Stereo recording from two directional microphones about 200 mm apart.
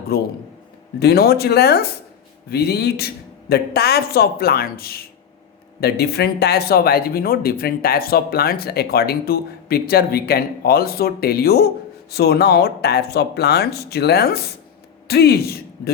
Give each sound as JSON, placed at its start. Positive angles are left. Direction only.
{"t": 0.1, "sound": "a man's voice", "side_deg": 50}